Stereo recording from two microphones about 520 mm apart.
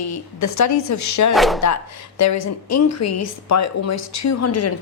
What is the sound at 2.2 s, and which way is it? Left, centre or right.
A woman's voice, left.